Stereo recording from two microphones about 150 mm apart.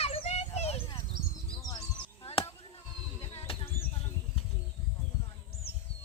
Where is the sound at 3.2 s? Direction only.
40° left (ahead or behind).